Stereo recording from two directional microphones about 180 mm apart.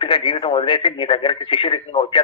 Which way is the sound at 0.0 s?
30° left (ahead or behind).